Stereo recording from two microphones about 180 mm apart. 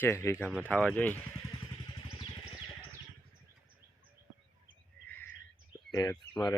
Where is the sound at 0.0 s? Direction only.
15° left (ahead or behind).